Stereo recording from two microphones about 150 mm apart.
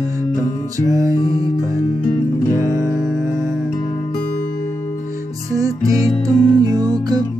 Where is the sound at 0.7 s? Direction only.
20° right (ahead or behind).